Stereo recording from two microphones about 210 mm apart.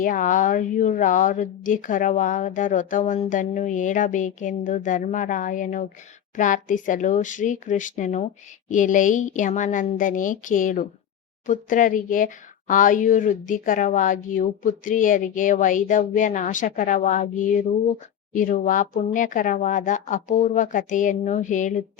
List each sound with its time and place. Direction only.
0.0 s speech: 40° left (ahead or behind)
18.3 s speech: 40° left (ahead or behind)